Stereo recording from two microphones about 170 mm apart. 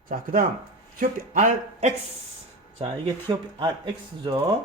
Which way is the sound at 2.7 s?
30° right (ahead or behind).